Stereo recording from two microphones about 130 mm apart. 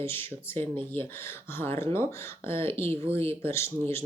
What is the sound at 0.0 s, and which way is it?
Speech, 15° left (ahead or behind).